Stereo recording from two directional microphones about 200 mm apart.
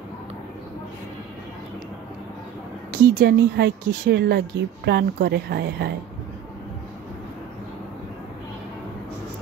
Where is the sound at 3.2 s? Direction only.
55° right (ahead or behind).